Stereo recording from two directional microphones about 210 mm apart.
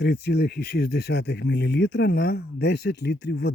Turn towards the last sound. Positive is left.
turn(degrees=55)  # may be behind; listen again after turning